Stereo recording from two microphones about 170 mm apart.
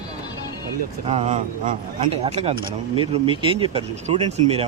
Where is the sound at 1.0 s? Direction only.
40° right (ahead or behind).